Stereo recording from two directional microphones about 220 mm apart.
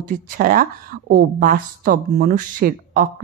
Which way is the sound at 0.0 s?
40° right (ahead or behind).